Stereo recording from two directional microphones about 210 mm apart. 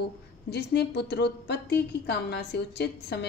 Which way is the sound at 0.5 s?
50° left (ahead or behind).